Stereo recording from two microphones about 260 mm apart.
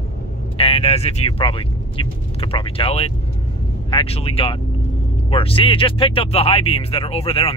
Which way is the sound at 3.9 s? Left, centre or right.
Left.